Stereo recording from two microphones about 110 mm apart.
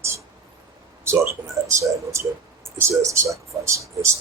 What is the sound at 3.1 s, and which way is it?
Speech, 30° right (ahead or behind).